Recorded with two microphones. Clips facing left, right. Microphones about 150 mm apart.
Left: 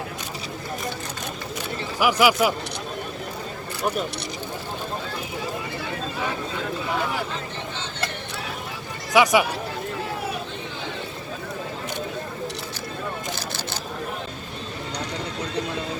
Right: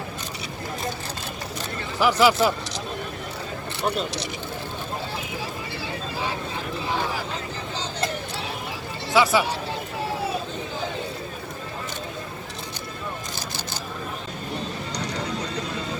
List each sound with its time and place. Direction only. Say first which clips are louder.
2.0 s speech: even; 10° left (ahead or behind)
9.1 s speech: left 2 dB; 15° left (ahead or behind)